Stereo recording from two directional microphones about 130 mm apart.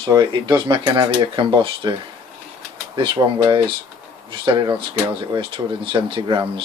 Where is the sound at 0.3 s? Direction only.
40° right (ahead or behind).